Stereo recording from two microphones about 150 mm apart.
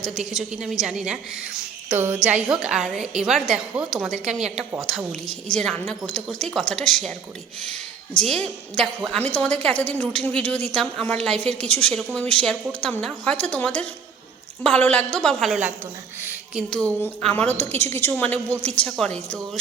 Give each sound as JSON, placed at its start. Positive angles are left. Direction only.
{"t": 0.0, "sound": "a woman's voice", "side_deg": 0}
{"t": 1.9, "sound": "speech", "side_deg": -15}
{"t": 2.2, "sound": "a woman's voice", "side_deg": -5}